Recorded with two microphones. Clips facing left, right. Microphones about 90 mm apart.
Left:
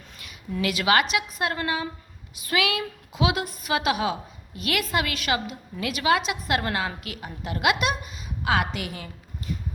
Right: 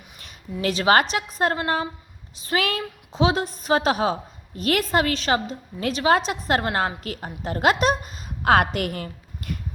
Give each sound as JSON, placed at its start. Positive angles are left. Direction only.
{"t": 0.6, "sound": "a woman's voice", "side_deg": -35}